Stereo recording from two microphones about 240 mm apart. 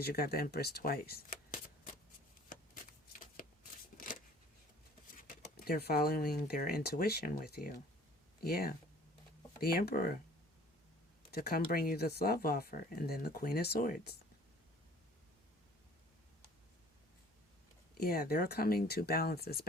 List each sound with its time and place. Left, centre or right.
0.0 s speech: left
3.4 s a sound: left
5.1 s speech: left
11.3 s speech: left
17.9 s speech: left